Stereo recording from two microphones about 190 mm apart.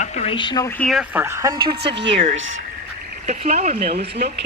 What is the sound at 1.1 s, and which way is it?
Speech, 15° right (ahead or behind).